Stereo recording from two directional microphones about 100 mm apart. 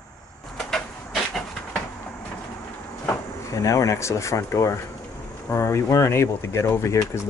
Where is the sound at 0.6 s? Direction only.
5° left (ahead or behind).